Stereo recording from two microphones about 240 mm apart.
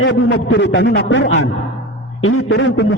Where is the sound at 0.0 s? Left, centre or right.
Left.